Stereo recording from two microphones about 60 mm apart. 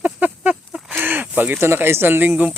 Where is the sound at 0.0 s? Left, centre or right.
Right.